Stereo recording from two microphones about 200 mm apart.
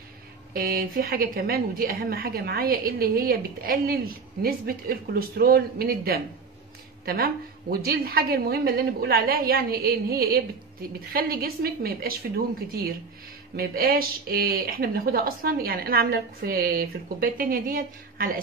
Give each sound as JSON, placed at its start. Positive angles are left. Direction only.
{"t": 0.5, "sound": "a woman's voice", "side_deg": -45}
{"t": 7.7, "sound": "a woman's voice", "side_deg": -50}